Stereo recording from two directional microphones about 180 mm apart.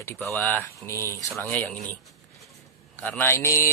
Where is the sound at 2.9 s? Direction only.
10° left (ahead or behind).